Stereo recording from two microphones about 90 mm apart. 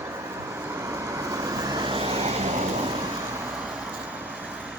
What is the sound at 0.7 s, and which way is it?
Vehicle, 30° right (ahead or behind).